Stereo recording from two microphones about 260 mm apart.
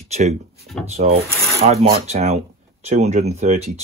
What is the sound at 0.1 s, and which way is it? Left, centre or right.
Speech, right.